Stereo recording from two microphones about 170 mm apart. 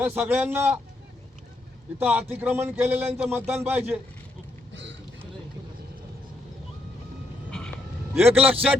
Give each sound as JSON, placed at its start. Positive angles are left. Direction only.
{"t": 0.0, "sound": "a man's voice", "side_deg": -10}
{"t": 2.0, "sound": "a man's voice", "side_deg": -10}
{"t": 4.7, "sound": "vehicle", "side_deg": -90}
{"t": 8.1, "sound": "a man's voice", "side_deg": -10}